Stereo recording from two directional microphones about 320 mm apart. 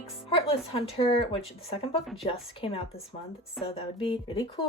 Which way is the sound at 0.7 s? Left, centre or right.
Centre.